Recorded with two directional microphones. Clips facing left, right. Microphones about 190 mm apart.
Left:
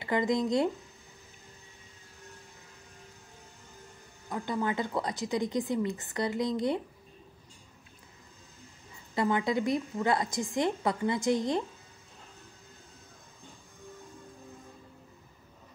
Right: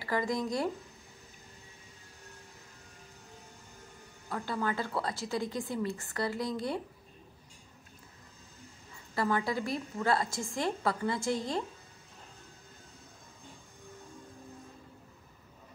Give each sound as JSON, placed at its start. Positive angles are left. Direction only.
{"t": 0.0, "sound": "speech", "side_deg": 20}
{"t": 4.3, "sound": "speech", "side_deg": 20}
{"t": 9.1, "sound": "speech", "side_deg": 20}